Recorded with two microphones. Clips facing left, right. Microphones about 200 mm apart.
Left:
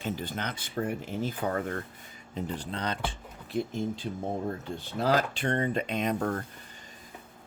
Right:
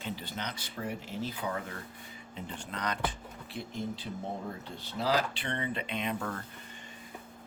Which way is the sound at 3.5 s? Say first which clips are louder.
Left 11 dB; 45° left (ahead or behind).